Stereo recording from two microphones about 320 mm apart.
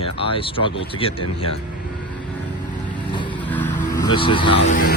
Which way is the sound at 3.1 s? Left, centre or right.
Centre.